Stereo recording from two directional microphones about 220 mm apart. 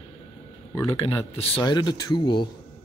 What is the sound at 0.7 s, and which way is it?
A man's voice, 10° left (ahead or behind).